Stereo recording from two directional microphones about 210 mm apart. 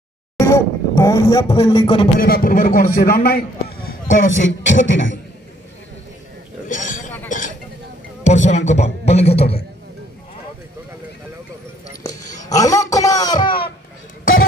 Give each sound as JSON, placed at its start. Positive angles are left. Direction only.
{"t": 0.4, "sound": "speech", "side_deg": 15}
{"t": 2.1, "sound": "a man's voice", "side_deg": 45}
{"t": 4.2, "sound": "music", "side_deg": 65}
{"t": 6.7, "sound": "speech", "side_deg": 40}
{"t": 7.2, "sound": "chink", "side_deg": 35}
{"t": 8.2, "sound": "music", "side_deg": 35}
{"t": 12.4, "sound": "a sound", "side_deg": 15}